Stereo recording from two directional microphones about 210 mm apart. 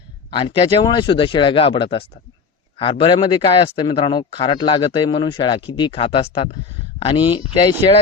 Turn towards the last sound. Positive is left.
turn(degrees=25)  # may be behind; listen again after turning